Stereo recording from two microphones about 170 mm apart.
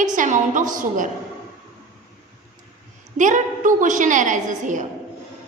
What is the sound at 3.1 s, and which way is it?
A woman's voice, 50° right (ahead or behind).